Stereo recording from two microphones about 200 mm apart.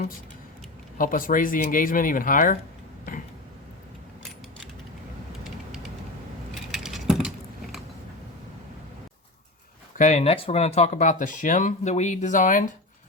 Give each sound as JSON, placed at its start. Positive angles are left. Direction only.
{"t": 0.9, "sound": "speech", "side_deg": 45}
{"t": 5.4, "sound": "a sound", "side_deg": 0}
{"t": 10.0, "sound": "speech", "side_deg": 35}